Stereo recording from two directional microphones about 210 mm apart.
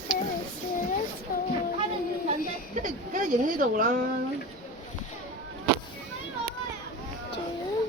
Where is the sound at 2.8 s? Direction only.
40° right (ahead or behind).